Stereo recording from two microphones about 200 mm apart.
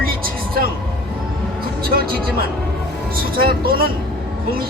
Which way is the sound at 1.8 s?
50° right (ahead or behind).